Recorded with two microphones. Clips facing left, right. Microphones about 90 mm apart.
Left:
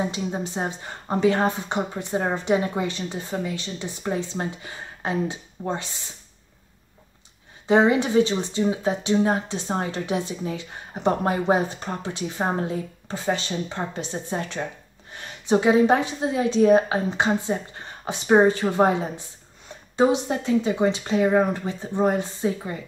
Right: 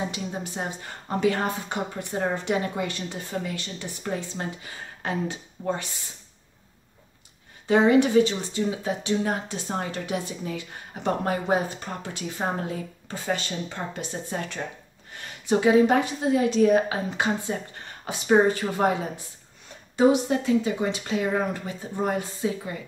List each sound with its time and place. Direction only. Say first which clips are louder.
0.1 s speech: left 4 dB; 25° left (ahead or behind)
7.6 s a woman's voice: even; 20° left (ahead or behind)